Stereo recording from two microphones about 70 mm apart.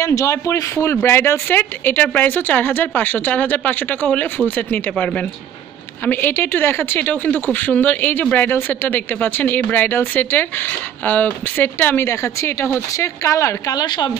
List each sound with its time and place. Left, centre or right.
0.0 s a woman's voice: left
1.6 s speech: left
6.0 s speech: left
12.0 s a woman's voice: left
13.7 s speech: left